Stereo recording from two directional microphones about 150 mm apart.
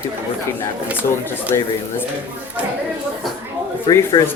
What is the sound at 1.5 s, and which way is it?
Speech, 20° left (ahead or behind).